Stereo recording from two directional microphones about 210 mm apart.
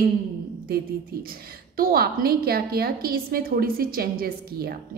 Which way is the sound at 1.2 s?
45° right (ahead or behind).